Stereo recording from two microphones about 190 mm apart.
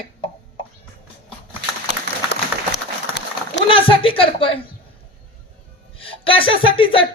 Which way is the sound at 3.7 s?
30° left (ahead or behind).